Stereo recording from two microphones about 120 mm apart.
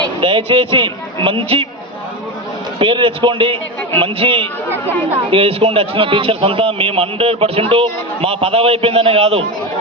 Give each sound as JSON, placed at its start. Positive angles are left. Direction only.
{"t": 0.2, "sound": "a man's voice", "side_deg": -45}
{"t": 2.7, "sound": "a man's voice", "side_deg": -45}